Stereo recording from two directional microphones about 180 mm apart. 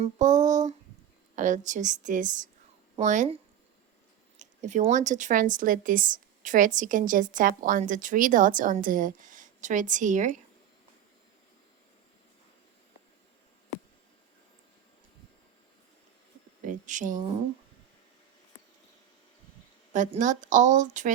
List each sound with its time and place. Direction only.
0.0 s speech: 45° right (ahead or behind)
4.4 s speech: 40° right (ahead or behind)
16.6 s a sound: 45° right (ahead or behind)
19.9 s speech: 45° right (ahead or behind)